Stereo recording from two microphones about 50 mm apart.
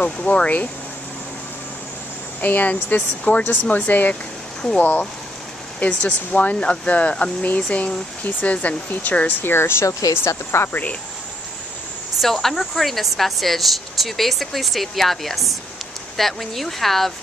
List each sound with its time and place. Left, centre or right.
0.0 s speech: left
2.4 s speech: left
9.4 s speech: left
10.7 s speech: left
12.2 s a woman's voice: centre